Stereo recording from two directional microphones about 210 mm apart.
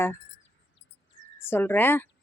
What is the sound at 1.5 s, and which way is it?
Speech, 10° left (ahead or behind).